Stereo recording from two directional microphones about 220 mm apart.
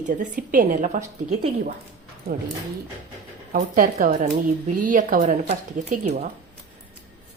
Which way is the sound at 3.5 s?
35° right (ahead or behind).